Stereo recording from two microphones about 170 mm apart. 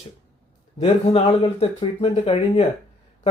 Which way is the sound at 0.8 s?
35° left (ahead or behind).